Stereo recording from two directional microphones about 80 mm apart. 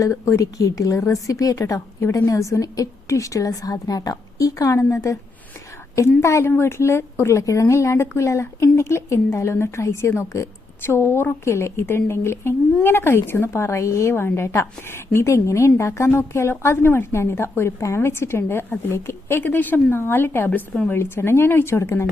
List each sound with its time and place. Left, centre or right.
0.0 s a woman's voice: left
6.0 s speech: left